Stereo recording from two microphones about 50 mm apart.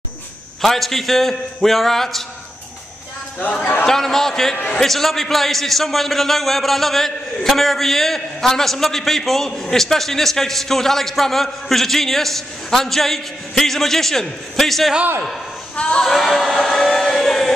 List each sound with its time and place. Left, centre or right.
0.6 s a man's voice: centre
3.8 s a man's voice: centre
15.7 s speech: left
16.0 s a sound: centre